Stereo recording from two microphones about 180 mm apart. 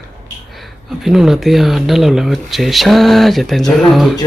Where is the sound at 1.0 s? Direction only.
Centre (ahead or behind).